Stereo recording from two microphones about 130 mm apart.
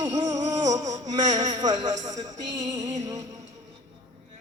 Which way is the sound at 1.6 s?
30° right (ahead or behind).